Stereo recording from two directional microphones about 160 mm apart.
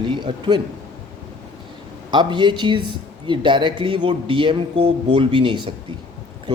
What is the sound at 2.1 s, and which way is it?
A man's voice, 30° right (ahead or behind).